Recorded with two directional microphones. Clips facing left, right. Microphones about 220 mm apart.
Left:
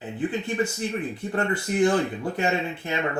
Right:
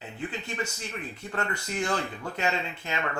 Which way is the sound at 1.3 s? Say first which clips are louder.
Left 6 dB; 25° left (ahead or behind).